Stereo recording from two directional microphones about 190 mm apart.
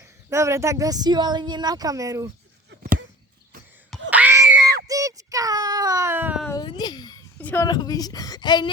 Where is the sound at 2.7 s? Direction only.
50° right (ahead or behind).